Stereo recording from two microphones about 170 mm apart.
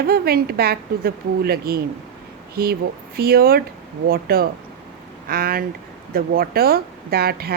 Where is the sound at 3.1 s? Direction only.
60° right (ahead or behind).